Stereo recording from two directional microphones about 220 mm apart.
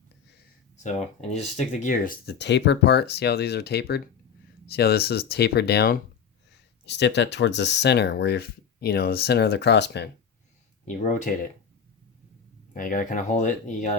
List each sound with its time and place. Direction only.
0.8 s speech: 30° left (ahead or behind); by 10.1 s 50° left (ahead or behind)
10.8 s speech: 35° left (ahead or behind)
12.7 s speech: 40° left (ahead or behind)